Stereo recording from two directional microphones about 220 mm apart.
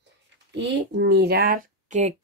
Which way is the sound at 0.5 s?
55° right (ahead or behind).